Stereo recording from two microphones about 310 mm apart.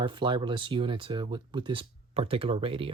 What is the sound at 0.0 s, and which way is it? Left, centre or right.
Speech, centre.